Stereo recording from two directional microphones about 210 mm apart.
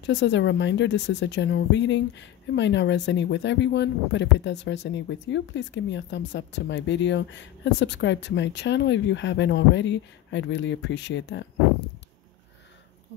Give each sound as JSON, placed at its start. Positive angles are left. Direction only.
{"t": 0.0, "sound": "speech", "side_deg": 60}